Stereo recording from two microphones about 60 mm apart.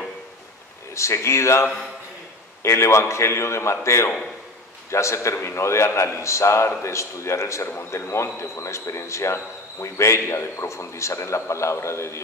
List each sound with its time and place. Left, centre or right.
0.9 s speech: left